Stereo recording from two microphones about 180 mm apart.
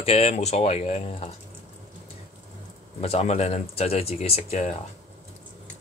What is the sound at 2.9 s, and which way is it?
Speech, 35° left (ahead or behind).